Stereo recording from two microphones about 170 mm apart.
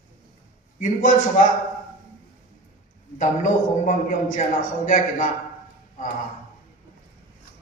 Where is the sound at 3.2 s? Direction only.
50° left (ahead or behind).